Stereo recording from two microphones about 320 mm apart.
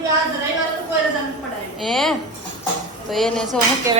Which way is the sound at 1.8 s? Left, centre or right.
Centre.